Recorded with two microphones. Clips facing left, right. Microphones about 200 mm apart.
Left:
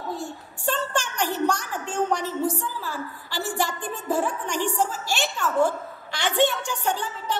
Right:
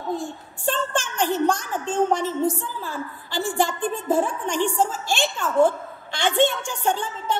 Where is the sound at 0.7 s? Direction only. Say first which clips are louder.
Right 2 dB; 25° right (ahead or behind).